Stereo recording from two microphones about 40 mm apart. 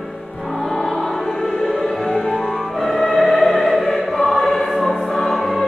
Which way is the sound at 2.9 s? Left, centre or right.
Centre.